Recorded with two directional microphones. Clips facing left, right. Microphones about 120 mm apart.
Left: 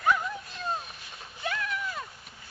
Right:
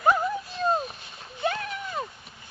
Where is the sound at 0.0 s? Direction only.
30° right (ahead or behind).